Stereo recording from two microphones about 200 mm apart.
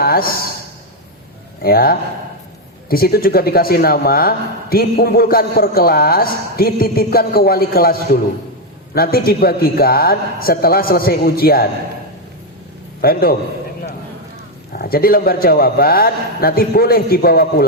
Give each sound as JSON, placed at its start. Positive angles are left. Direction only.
{"t": 0.0, "sound": "a sound", "side_deg": 50}
{"t": 1.6, "sound": "a man's voice", "side_deg": 50}
{"t": 13.0, "sound": "a man's voice", "side_deg": 50}
{"t": 14.7, "sound": "a man's voice", "side_deg": 50}